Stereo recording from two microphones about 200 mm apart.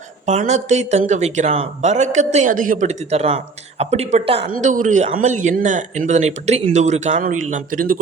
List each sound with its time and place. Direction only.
0.3 s speech: 35° right (ahead or behind)
4.4 s a man's voice: 40° right (ahead or behind)